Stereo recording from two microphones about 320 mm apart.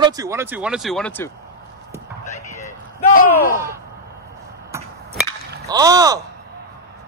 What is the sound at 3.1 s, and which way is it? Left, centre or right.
Speech, left.